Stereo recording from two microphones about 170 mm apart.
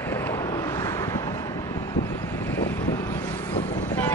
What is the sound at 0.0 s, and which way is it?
Vehicle, 10° left (ahead or behind).